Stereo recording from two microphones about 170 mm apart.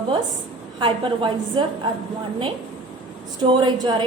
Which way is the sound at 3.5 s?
25° right (ahead or behind).